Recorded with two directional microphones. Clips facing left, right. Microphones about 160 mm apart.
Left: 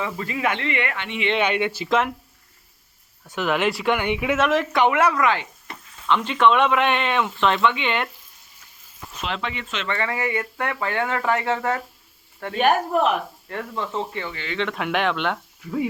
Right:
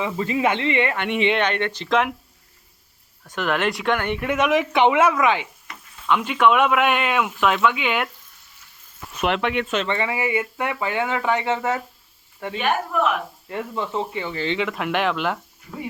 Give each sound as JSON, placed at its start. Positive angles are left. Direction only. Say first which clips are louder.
{"t": 0.0, "sound": "speech", "louder": "right 4 dB", "side_deg": -25}
{"t": 0.9, "sound": "speech", "louder": "right 6 dB", "side_deg": -55}
{"t": 1.4, "sound": "speech", "louder": "left 1 dB", "side_deg": 10}
{"t": 3.2, "sound": "speech", "louder": "left 1 dB", "side_deg": 10}
{"t": 4.4, "sound": "speech", "louder": "right 3 dB", "side_deg": -15}
{"t": 9.2, "sound": "speech", "louder": "right 7 dB", "side_deg": -60}
{"t": 9.8, "sound": "speech", "louder": "right 2 dB", "side_deg": -20}
{"t": 12.5, "sound": "speech", "louder": "left 4 dB", "side_deg": 40}
{"t": 13.5, "sound": "speech", "louder": "right 2 dB", "side_deg": -10}
{"t": 14.3, "sound": "speech", "louder": "right 7 dB", "side_deg": -30}
{"t": 14.6, "sound": "speech", "louder": "left 2 dB", "side_deg": 0}